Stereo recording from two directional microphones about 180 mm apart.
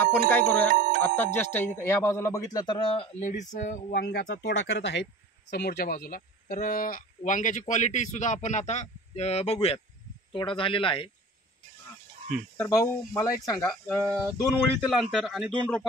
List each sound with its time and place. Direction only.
0.3 s speech: 10° left (ahead or behind); by 3.3 s 30° left (ahead or behind)
3.3 s speech: 45° left (ahead or behind)
3.9 s speech: 60° left (ahead or behind); by 11.1 s 30° left (ahead or behind)
12.5 s speech: 15° left (ahead or behind)
13.7 s speech: 5° left (ahead or behind)